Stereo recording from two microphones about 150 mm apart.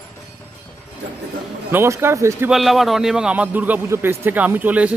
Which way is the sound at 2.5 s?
Centre (ahead or behind).